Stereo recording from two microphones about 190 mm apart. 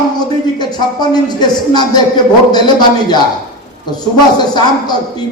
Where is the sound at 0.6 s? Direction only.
20° left (ahead or behind).